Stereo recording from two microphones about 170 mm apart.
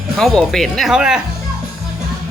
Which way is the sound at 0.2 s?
Centre (ahead or behind).